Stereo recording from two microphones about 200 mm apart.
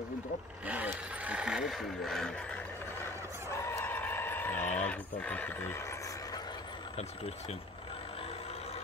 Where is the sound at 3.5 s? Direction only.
15° left (ahead or behind).